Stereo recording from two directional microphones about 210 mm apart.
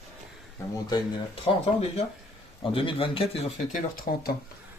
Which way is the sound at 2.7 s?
25° left (ahead or behind).